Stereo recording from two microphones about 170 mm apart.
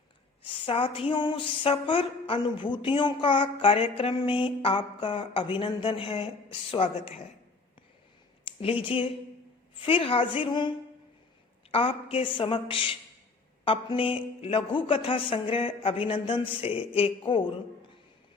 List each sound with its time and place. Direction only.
0.4 s speech: 30° left (ahead or behind)
8.5 s a sound: 30° left (ahead or behind)
8.8 s speech: 30° left (ahead or behind)
11.7 s speech: 35° left (ahead or behind)